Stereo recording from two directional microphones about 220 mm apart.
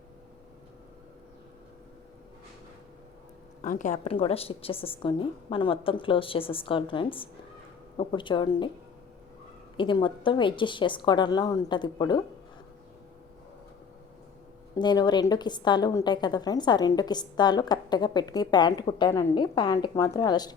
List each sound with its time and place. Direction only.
3.6 s a woman's voice: 35° left (ahead or behind)
9.7 s a woman's voice: 20° left (ahead or behind)
14.8 s a woman's voice: 20° left (ahead or behind)